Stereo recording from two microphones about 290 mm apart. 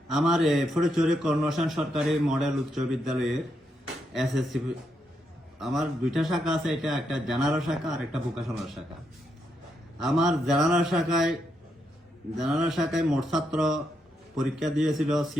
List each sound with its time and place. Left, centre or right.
0.1 s a man's voice: centre
10.0 s a man's voice: centre
12.4 s a man's voice: centre